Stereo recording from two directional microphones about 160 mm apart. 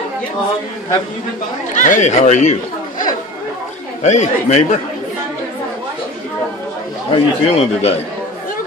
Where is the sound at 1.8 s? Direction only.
50° left (ahead or behind).